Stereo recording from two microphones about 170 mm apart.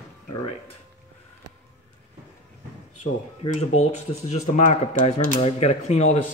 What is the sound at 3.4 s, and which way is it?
Speech, 40° left (ahead or behind).